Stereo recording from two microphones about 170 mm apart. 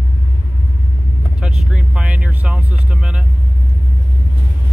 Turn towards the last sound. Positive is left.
turn(degrees=-5)  # may be behind; listen again after turning